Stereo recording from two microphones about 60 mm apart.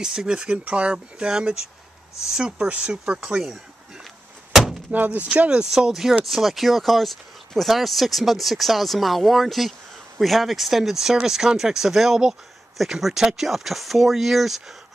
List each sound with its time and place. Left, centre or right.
0.0 s speech: centre
4.0 s a sound: centre
4.9 s speech: right; by 14.6 s centre